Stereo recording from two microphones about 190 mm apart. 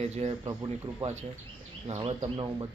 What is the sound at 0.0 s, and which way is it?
Speech, 35° right (ahead or behind).